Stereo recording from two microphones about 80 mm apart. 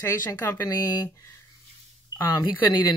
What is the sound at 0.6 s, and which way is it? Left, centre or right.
Speech, left.